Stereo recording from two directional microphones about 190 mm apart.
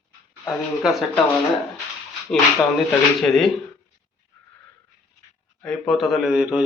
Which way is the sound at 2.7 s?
Centre (ahead or behind).